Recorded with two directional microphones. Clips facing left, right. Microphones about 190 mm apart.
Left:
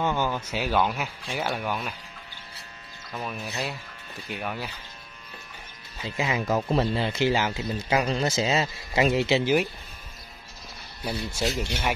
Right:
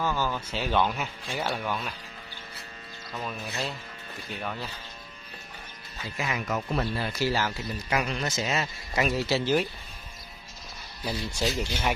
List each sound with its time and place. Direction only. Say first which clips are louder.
0.0 s speech: left 3 dB; 20° left (ahead or behind)
3.2 s speech: left 1 dB; 10° left (ahead or behind)
6.0 s speech: left 5 dB; 25° left (ahead or behind)
11.1 s speech: left 1 dB; 5° left (ahead or behind)